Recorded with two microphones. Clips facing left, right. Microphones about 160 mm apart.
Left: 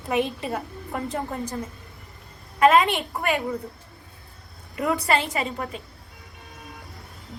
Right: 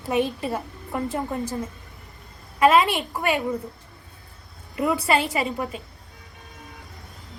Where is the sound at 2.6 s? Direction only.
Centre (ahead or behind).